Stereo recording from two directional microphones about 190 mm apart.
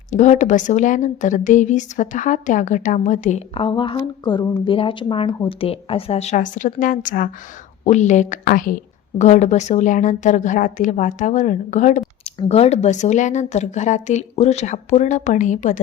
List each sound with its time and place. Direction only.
0.1 s speech: 40° left (ahead or behind)